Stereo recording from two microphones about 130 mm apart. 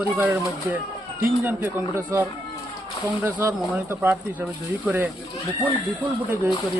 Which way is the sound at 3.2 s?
15° right (ahead or behind).